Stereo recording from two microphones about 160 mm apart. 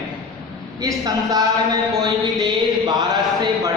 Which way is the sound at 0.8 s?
20° right (ahead or behind).